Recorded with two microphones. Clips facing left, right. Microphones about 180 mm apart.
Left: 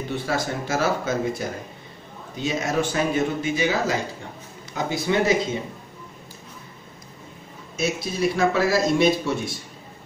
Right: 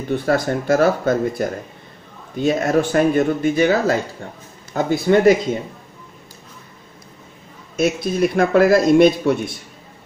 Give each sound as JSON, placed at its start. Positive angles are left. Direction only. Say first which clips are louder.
{"t": 0.1, "sound": "speech", "louder": "right 9 dB", "side_deg": -55}
{"t": 7.7, "sound": "speech", "louder": "right 7 dB", "side_deg": -55}